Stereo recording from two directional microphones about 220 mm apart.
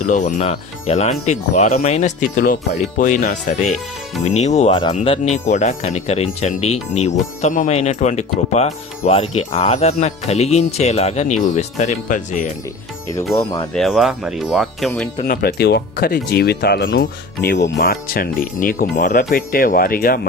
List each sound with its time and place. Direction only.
0.0 s speech: 35° left (ahead or behind)
13.3 s speech: 15° left (ahead or behind)
13.7 s speech: centre (ahead or behind)
15.2 s speech: 45° left (ahead or behind)